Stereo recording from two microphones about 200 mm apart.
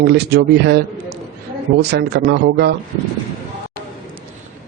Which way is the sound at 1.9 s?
55° right (ahead or behind).